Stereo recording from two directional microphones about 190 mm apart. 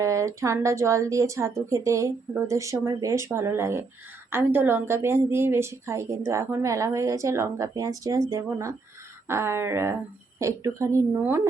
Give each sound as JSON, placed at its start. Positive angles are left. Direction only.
{"t": 0.0, "sound": "a woman's voice", "side_deg": -15}